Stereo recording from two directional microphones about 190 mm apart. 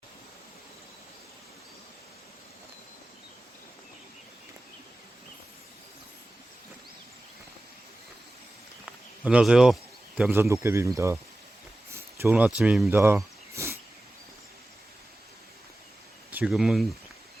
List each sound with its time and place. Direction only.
9.2 s speech: 5° right (ahead or behind)
13.0 s a sound: 15° right (ahead or behind)
16.3 s speech: 5° right (ahead or behind)